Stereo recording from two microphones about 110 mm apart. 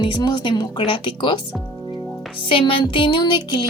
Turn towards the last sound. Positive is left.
turn(degrees=45)  # may be behind; listen again after turning